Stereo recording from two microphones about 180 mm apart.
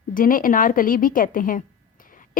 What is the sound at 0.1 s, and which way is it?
Speech, 50° left (ahead or behind).